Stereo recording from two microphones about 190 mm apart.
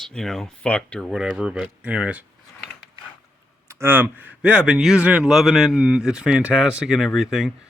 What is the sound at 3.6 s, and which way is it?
Speech, 15° right (ahead or behind).